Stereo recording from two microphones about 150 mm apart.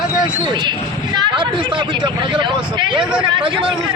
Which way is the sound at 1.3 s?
35° right (ahead or behind).